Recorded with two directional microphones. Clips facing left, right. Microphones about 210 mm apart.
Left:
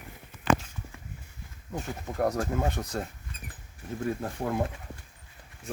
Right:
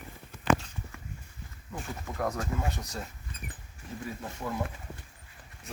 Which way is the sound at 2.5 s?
55° left (ahead or behind).